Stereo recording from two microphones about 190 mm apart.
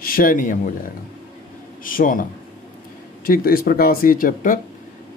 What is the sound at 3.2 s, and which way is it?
Speech, 50° left (ahead or behind).